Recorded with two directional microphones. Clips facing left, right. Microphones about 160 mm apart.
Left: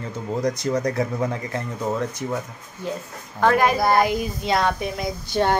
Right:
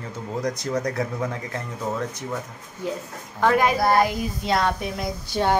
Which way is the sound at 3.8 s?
Centre (ahead or behind).